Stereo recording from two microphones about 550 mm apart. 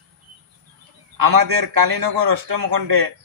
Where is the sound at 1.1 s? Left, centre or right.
Right.